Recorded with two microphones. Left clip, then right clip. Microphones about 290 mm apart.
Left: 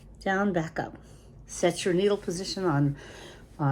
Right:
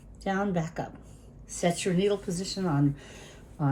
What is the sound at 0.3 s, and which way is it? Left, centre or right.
Speech, left.